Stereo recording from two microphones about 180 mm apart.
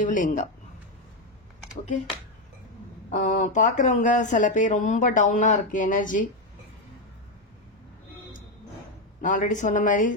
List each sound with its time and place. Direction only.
0.0 s speech: 45° left (ahead or behind)
3.2 s speech: 45° left (ahead or behind)
9.2 s speech: 45° left (ahead or behind)